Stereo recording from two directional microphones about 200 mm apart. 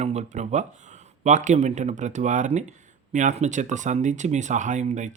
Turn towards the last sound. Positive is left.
turn(degrees=-35)  # may be behind; listen again after turning